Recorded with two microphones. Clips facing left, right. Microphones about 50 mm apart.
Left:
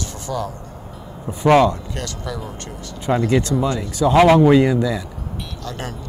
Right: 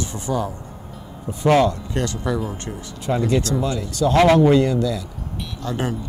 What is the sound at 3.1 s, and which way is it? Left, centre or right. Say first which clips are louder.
Speech: left 2 dB; left.